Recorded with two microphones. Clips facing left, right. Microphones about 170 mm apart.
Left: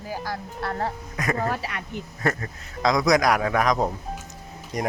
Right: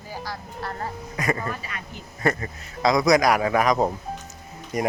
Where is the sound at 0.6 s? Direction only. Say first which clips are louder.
Left 4 dB; 65° left (ahead or behind).